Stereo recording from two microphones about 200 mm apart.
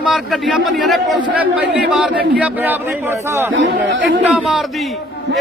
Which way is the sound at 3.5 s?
70° right (ahead or behind).